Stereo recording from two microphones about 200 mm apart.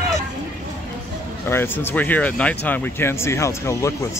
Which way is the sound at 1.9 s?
10° left (ahead or behind).